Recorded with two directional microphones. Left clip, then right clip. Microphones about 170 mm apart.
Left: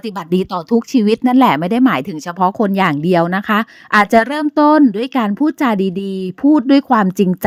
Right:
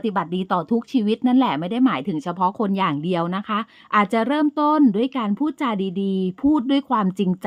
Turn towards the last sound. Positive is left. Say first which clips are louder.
# left 8 dB
turn(degrees=35)  # may be behind; listen again after turning